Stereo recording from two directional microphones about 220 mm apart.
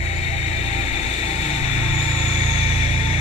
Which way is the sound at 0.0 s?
30° left (ahead or behind).